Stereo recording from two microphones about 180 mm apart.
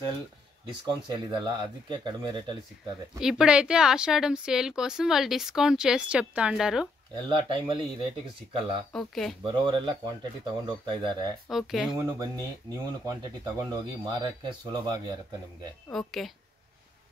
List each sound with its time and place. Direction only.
1.0 s speech: 25° right (ahead or behind)
3.2 s speech: 5° right (ahead or behind)
7.2 s speech: 25° right (ahead or behind)
8.9 s speech: centre (ahead or behind)
9.4 s speech: 25° right (ahead or behind)
11.4 s speech: centre (ahead or behind)
12.0 s speech: 20° right (ahead or behind)
15.9 s speech: centre (ahead or behind)